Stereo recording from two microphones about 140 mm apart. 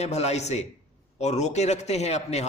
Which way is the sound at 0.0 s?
50° left (ahead or behind).